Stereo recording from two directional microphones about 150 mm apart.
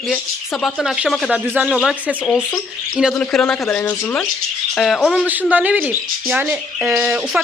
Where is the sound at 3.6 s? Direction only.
15° left (ahead or behind).